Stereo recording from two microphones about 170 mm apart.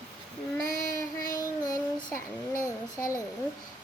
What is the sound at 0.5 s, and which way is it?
Child singing, 20° left (ahead or behind).